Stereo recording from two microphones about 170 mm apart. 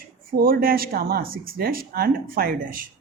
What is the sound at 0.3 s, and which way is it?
Speech, 60° right (ahead or behind).